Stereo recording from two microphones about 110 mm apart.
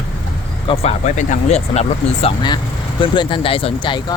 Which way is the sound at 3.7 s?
45° left (ahead or behind).